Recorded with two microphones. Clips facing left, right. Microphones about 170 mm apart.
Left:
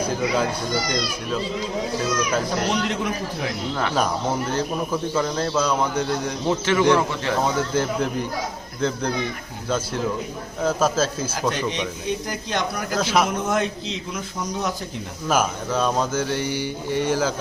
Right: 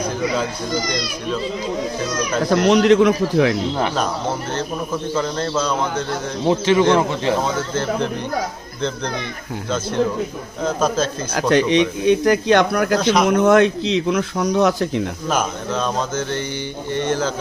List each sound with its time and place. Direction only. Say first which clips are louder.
2.5 s a man's voice: right 10 dB; 90° right
5.1 s speech: right 2 dB; 5° left (ahead or behind)
6.5 s speech: right 4 dB; 20° right (ahead or behind)
9.6 s a man's voice: right 4 dB; 10° left (ahead or behind)
11.5 s speech: right 11 dB; 80° right
13.0 s a man's voice: even; 5° left (ahead or behind)
13.2 s speech: right 10 dB; 75° right (ahead or behind)
15.3 s speech: left 2 dB; 10° left (ahead or behind)